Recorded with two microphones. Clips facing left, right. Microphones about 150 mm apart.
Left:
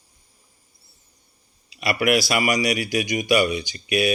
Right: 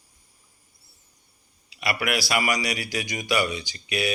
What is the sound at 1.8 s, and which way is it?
Speech, 25° left (ahead or behind).